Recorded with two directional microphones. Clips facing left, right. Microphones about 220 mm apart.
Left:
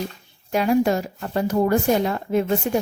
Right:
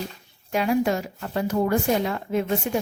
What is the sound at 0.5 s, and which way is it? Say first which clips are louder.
Speech: left 3 dB; 40° left (ahead or behind).